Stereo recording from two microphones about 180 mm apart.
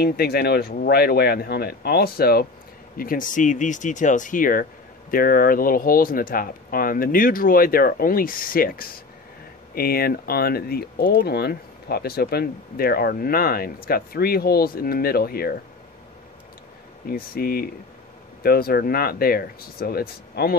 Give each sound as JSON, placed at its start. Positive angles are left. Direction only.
{"t": 0.0, "sound": "speech", "side_deg": 60}
{"t": 17.1, "sound": "speech", "side_deg": 55}